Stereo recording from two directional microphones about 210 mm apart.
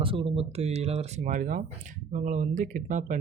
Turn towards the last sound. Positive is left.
turn(degrees=-35)  # may be behind; listen again after turning